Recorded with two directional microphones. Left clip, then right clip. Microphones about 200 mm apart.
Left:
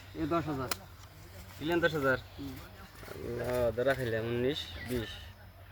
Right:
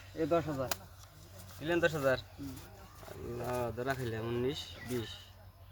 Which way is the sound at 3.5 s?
20° right (ahead or behind).